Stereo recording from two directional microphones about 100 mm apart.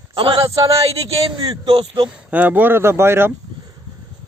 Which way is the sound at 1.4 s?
45° right (ahead or behind).